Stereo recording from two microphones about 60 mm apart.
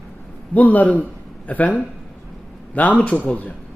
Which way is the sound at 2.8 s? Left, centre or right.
Left.